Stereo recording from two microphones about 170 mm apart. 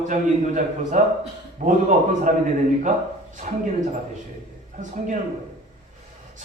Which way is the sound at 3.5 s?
50° right (ahead or behind).